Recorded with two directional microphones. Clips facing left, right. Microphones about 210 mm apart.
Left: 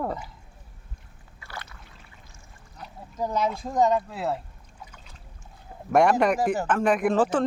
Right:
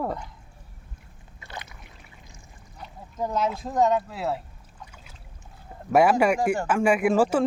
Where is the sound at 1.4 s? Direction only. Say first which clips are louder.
Right 1 dB; 20° right (ahead or behind).